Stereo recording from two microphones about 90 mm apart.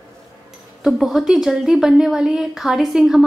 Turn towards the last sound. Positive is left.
turn(degrees=-5)  # may be behind; listen again after turning